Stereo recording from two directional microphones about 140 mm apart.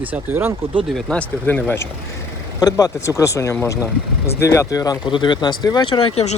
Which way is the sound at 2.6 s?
25° left (ahead or behind).